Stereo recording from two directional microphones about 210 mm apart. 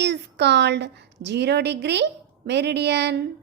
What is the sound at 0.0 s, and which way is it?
A woman's voice, 55° right (ahead or behind).